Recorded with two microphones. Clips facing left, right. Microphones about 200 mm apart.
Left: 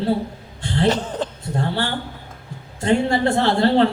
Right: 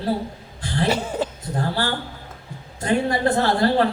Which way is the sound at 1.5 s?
25° left (ahead or behind).